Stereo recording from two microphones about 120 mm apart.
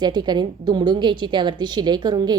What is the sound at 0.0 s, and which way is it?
A woman's voice, 35° right (ahead or behind).